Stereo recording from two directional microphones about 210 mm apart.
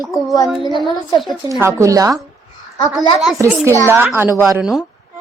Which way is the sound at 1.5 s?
15° right (ahead or behind).